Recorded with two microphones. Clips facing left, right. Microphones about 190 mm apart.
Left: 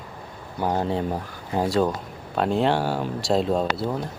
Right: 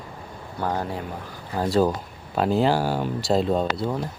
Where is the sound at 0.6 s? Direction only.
20° left (ahead or behind).